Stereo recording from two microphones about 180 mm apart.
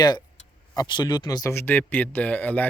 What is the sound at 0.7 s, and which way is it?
Speech, 25° left (ahead or behind).